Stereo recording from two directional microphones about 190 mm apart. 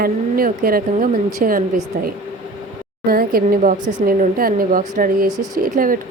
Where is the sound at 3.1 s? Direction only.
50° right (ahead or behind).